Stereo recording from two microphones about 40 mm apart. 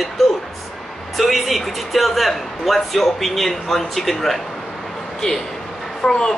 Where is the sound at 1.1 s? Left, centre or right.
Centre.